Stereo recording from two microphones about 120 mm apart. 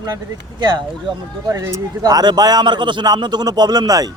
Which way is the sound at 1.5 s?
25° right (ahead or behind).